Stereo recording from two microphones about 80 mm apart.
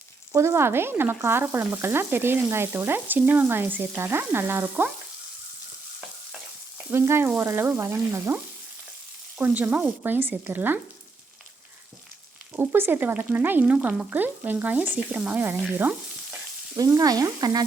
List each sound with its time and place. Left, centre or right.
0.3 s sizzle: right
6.9 s frying: right
7.3 s sizzle: right
7.8 s frying: right
9.4 s sizzle: right
12.5 s sizzle: right; by 14.1 s centre
14.1 s sizzle: right
16.7 s frying: right